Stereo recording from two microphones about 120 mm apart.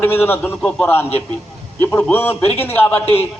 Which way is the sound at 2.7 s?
15° left (ahead or behind).